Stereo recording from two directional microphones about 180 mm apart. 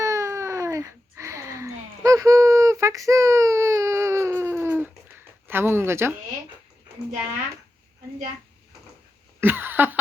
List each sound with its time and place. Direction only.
0.0 s baby cry: 15° right (ahead or behind)
5.5 s speech: 10° right (ahead or behind)
9.4 s a sound: 10° right (ahead or behind)